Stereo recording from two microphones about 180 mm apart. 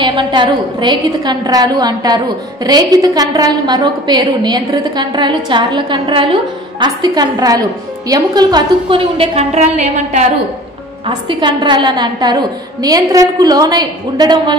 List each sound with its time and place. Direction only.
0.0 s a woman's voice: 25° right (ahead or behind)
11.1 s a woman's voice: 25° right (ahead or behind)